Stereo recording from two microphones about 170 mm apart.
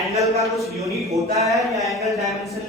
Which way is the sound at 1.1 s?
20° right (ahead or behind).